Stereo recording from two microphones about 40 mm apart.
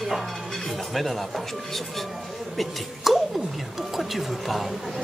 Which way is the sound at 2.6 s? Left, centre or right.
Centre.